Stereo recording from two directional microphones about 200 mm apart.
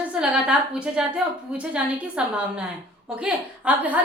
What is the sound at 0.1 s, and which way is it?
A woman's voice, 5° right (ahead or behind).